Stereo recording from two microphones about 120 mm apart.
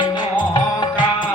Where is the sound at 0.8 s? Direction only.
40° left (ahead or behind).